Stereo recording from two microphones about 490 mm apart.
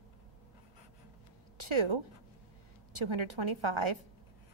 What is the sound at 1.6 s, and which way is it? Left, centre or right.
A woman's voice, right.